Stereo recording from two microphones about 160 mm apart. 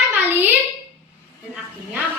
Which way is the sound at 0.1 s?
15° right (ahead or behind).